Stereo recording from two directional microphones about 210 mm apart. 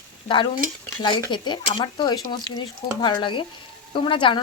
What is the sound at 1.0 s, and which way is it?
Speech, 20° left (ahead or behind).